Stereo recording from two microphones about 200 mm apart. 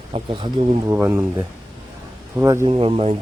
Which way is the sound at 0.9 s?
15° right (ahead or behind).